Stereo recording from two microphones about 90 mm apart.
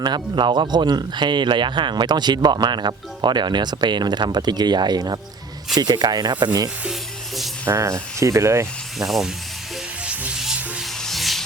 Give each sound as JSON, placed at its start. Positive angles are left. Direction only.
{"t": 0.0, "sound": "speech", "side_deg": -55}
{"t": 5.7, "sound": "rub", "side_deg": -50}
{"t": 7.6, "sound": "speech", "side_deg": -30}
{"t": 9.0, "sound": "rub", "side_deg": -5}
{"t": 10.1, "sound": "music", "side_deg": -10}
{"t": 11.0, "sound": "rub", "side_deg": 0}